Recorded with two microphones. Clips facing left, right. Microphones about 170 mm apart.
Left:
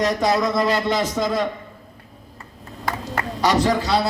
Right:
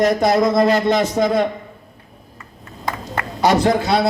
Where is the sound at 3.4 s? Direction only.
55° right (ahead or behind).